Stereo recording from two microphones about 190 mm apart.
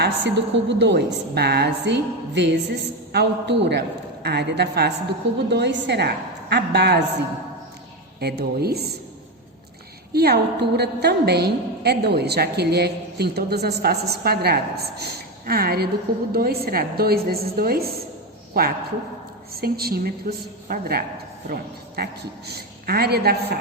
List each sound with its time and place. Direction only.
0.0 s a woman's voice: 65° right (ahead or behind)
8.2 s a woman's voice: 55° right (ahead or behind)
10.1 s a woman's voice: 55° right (ahead or behind)